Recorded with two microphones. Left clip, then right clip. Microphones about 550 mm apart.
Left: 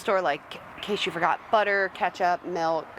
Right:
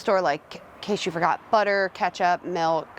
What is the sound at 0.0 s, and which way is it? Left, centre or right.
Speech, centre.